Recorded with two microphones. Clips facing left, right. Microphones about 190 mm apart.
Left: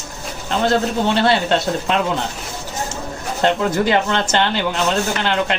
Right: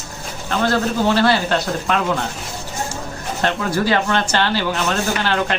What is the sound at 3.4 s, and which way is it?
Speech, 20° left (ahead or behind).